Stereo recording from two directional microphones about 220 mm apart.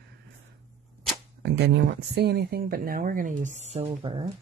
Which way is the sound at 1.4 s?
50° right (ahead or behind).